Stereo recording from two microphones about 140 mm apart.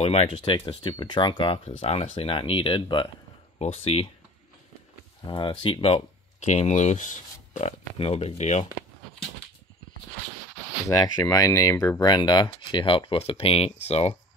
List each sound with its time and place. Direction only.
0.0 s speech: 45° left (ahead or behind)
0.4 s speech: 35° left (ahead or behind)
3.5 s speech: 45° left (ahead or behind)
5.2 s speech: 35° left (ahead or behind)
6.4 s speech: 55° left (ahead or behind)
10.9 s speech: 25° left (ahead or behind)
12.0 s speech: 30° left (ahead or behind); by 14.1 s 50° left (ahead or behind)